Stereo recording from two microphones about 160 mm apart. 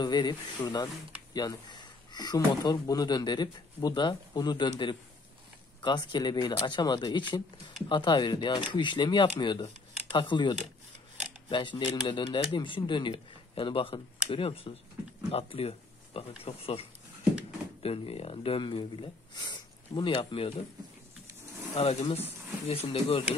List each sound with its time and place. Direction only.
0.0 s speech: 25° left (ahead or behind)
17.8 s speech: 35° left (ahead or behind)
21.7 s speech: 40° left (ahead or behind)